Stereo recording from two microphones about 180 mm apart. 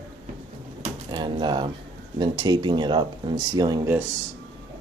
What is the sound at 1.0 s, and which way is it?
Speech, 25° right (ahead or behind).